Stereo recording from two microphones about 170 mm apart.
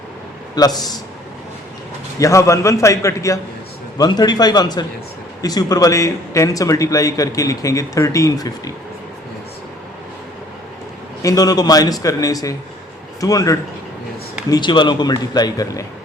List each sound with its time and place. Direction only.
0.5 s speech: 20° left (ahead or behind)
2.1 s a man's voice: 20° left (ahead or behind)
11.2 s speech: 20° left (ahead or behind)